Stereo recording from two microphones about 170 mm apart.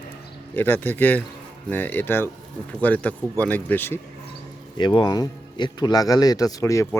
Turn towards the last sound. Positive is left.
turn(degrees=20)  # may be behind; listen again after turning